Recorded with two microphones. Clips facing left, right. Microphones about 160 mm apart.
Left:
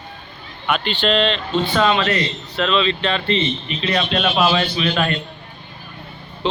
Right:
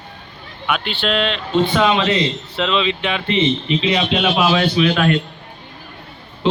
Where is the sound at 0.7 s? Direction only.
5° right (ahead or behind).